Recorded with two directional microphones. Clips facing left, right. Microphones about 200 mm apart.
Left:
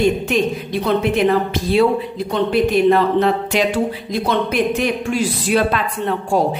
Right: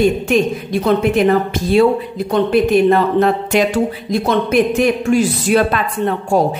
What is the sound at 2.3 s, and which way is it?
A woman's voice, 45° right (ahead or behind).